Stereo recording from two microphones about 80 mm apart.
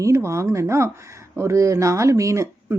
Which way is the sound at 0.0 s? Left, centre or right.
Right.